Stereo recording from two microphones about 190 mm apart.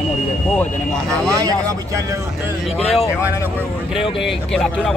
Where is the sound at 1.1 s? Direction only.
15° right (ahead or behind).